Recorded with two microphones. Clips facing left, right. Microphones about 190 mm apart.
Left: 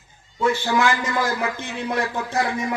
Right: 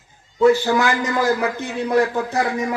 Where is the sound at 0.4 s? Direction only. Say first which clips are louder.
Right 5 dB; 40° right (ahead or behind).